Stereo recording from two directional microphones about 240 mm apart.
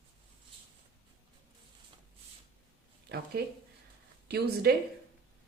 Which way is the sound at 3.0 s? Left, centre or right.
Right.